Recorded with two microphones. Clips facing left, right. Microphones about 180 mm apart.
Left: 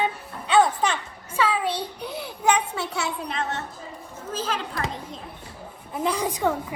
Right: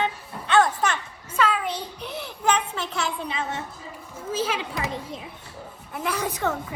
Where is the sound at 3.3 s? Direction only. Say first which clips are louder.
Left 1 dB; 5° right (ahead or behind).